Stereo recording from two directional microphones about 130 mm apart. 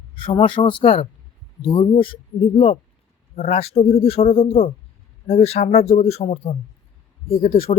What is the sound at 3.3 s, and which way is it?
A man's voice, 55° left (ahead or behind).